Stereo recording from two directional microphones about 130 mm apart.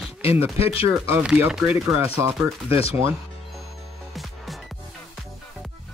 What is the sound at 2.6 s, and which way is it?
Speech, 50° left (ahead or behind).